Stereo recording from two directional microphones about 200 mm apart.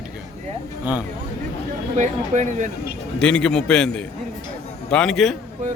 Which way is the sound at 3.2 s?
5° left (ahead or behind).